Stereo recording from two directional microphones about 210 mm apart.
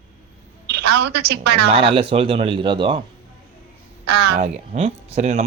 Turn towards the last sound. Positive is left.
turn(degrees=-30)  # may be behind; listen again after turning